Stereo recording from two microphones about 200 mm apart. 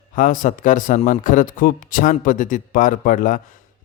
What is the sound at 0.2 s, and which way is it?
A man's voice, 40° left (ahead or behind).